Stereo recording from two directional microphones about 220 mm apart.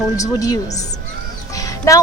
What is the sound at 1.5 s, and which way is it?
Music, 15° left (ahead or behind).